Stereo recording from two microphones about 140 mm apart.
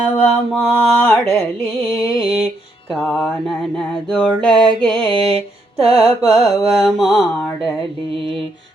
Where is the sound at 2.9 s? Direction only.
Centre (ahead or behind).